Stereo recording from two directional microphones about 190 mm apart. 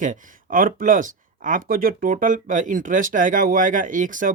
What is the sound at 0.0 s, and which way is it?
Speech, 45° right (ahead or behind).